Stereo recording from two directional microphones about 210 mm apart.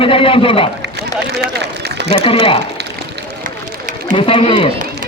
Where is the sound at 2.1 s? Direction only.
25° left (ahead or behind).